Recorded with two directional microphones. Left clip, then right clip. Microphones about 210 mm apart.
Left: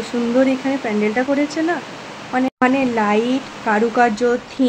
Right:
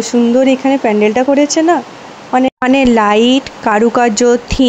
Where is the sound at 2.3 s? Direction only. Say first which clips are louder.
Right 6 dB; 45° right (ahead or behind).